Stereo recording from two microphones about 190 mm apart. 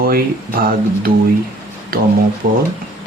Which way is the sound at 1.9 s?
50° right (ahead or behind).